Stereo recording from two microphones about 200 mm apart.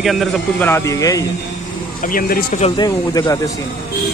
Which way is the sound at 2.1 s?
45° left (ahead or behind).